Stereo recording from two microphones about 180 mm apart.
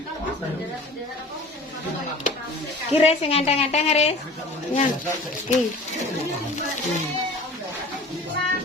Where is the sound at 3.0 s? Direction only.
35° left (ahead or behind).